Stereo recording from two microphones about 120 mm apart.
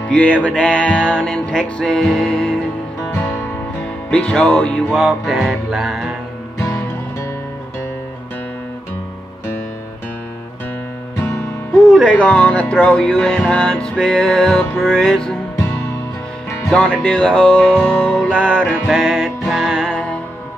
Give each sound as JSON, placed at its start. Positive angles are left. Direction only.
{"t": 0.1, "sound": "music", "side_deg": 10}
{"t": 4.1, "sound": "music", "side_deg": 10}
{"t": 5.0, "sound": "music", "side_deg": 0}
{"t": 11.8, "sound": "music", "side_deg": 5}
{"t": 16.7, "sound": "music", "side_deg": 10}